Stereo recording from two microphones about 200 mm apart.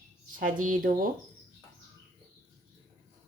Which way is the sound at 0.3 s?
40° right (ahead or behind).